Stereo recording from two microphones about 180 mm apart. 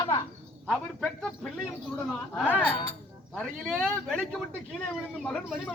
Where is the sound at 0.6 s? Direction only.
Centre (ahead or behind).